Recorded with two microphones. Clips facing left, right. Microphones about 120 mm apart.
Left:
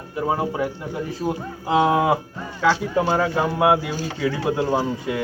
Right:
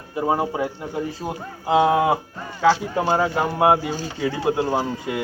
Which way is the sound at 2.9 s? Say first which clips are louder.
Even; 15° right (ahead or behind).